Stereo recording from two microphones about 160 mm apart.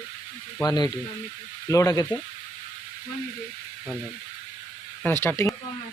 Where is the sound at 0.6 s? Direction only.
25° left (ahead or behind).